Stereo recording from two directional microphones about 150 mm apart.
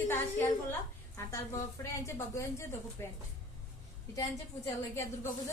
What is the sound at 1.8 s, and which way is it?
A woman's voice, 20° left (ahead or behind).